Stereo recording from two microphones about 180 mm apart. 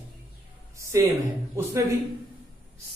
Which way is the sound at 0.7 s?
15° right (ahead or behind).